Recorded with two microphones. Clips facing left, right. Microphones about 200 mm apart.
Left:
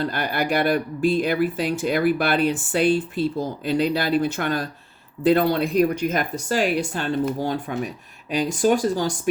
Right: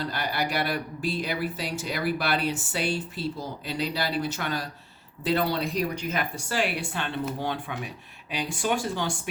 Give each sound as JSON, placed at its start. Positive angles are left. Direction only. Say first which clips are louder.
{"t": 0.0, "sound": "speech", "louder": "left 5 dB", "side_deg": 50}